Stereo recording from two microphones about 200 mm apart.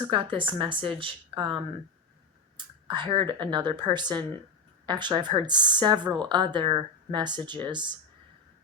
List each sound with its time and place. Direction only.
0.0 s speech: 25° right (ahead or behind)
2.6 s speech: 25° right (ahead or behind)